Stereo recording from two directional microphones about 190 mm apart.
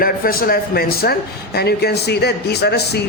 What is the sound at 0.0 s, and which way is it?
Speech, 50° left (ahead or behind).